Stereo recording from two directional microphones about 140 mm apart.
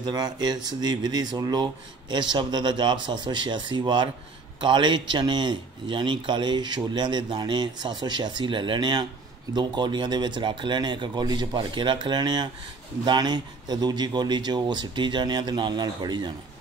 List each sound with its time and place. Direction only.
0.0 s a man's voice: 30° right (ahead or behind)